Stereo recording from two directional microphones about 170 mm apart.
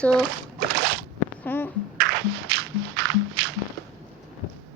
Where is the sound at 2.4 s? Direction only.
90° right.